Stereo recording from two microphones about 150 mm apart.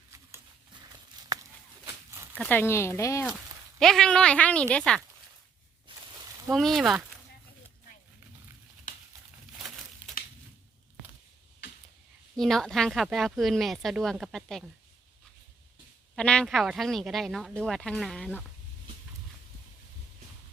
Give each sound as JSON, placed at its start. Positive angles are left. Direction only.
{"t": 1.8, "sound": "a sound", "side_deg": -20}
{"t": 2.4, "sound": "speech", "side_deg": 15}
{"t": 3.8, "sound": "speech", "side_deg": 5}
{"t": 6.5, "sound": "speech", "side_deg": 0}
{"t": 9.6, "sound": "crumpling", "side_deg": 0}
{"t": 12.4, "sound": "speech", "side_deg": 0}
{"t": 16.1, "sound": "speech", "side_deg": 5}